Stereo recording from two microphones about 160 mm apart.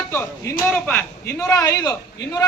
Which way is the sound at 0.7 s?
10° left (ahead or behind).